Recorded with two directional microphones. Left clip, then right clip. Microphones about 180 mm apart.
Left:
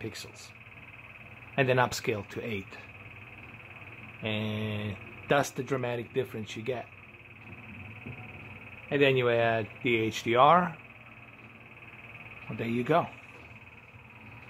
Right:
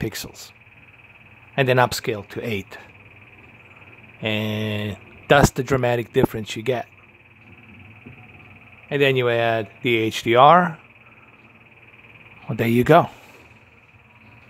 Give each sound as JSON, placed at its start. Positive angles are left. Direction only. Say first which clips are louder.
{"t": 0.0, "sound": "speech", "louder": "right 10 dB", "side_deg": -50}
{"t": 1.5, "sound": "speech", "louder": "right 8 dB", "side_deg": -45}
{"t": 2.4, "sound": "speech", "louder": "right 9 dB", "side_deg": -45}
{"t": 4.2, "sound": "speech", "louder": "right 9 dB", "side_deg": -50}
{"t": 8.8, "sound": "speech", "louder": "right 6 dB", "side_deg": -50}
{"t": 12.5, "sound": "speech", "louder": "right 12 dB", "side_deg": -60}